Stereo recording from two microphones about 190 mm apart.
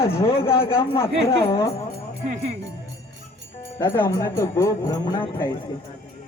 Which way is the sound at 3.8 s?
20° left (ahead or behind).